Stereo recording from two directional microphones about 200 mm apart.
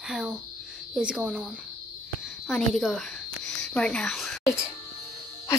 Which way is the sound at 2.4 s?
Centre (ahead or behind).